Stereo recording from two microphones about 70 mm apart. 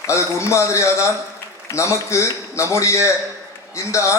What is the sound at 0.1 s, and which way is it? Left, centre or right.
A man's voice, left.